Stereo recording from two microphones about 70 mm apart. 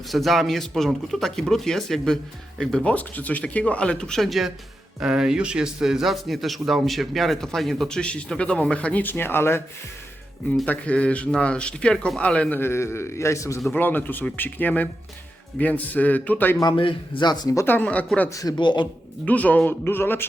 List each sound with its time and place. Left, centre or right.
0.1 s a man's voice: centre
2.9 s a man's voice: left
10.7 s speech: centre
12.5 s a man's voice: left
13.7 s speech: left
17.2 s speech: left
17.7 s speech: left
18.3 s a man's voice: left
18.5 s speech: left
19.2 s speech: left